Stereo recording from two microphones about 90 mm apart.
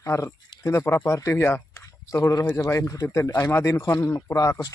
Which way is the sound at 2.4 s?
50° left (ahead or behind).